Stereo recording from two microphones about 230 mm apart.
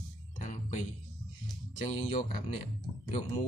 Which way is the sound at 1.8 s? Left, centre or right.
Left.